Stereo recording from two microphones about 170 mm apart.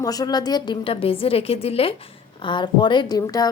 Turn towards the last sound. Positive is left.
turn(degrees=20)  # may be behind; listen again after turning